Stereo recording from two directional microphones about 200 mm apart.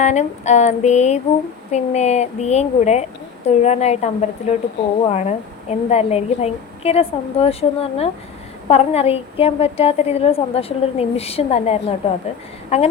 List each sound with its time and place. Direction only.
0.0 s a woman's voice: 35° left (ahead or behind)